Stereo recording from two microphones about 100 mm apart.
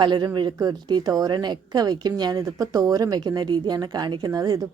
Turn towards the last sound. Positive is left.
turn(degrees=-35)  # may be behind; listen again after turning